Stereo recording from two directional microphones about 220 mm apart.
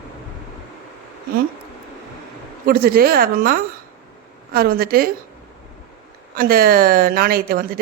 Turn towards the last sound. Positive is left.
turn(degrees=-40)  # may be behind; listen again after turning